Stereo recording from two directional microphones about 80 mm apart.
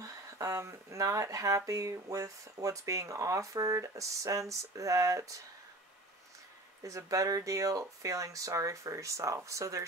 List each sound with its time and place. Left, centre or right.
0.0 s speech: right
6.8 s speech: right